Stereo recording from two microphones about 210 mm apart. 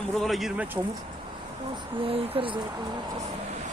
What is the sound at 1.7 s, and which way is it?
Speech, 25° right (ahead or behind).